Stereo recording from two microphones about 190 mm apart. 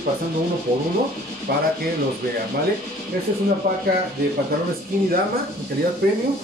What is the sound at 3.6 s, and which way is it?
Speech, 50° right (ahead or behind).